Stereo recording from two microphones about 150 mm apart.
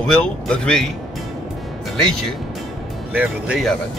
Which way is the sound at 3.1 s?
10° right (ahead or behind).